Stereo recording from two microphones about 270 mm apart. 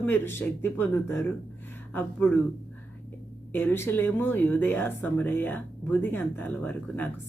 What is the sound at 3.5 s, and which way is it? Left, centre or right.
Speech, centre.